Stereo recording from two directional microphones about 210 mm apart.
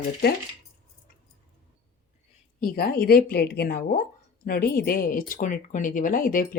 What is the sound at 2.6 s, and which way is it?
Speech, 45° left (ahead or behind).